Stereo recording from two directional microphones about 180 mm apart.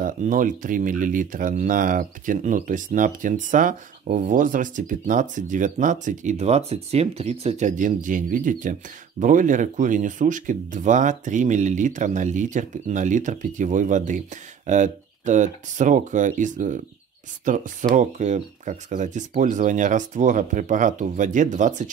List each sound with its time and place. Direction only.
0.0 s speech: 45° right (ahead or behind)